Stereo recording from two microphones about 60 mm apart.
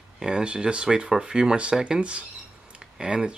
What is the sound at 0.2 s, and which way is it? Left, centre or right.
Speech, centre.